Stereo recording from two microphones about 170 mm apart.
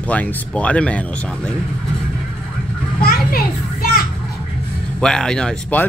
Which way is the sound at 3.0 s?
60° left (ahead or behind).